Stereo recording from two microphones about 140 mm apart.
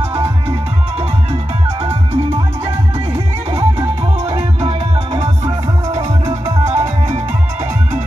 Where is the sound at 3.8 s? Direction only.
20° right (ahead or behind).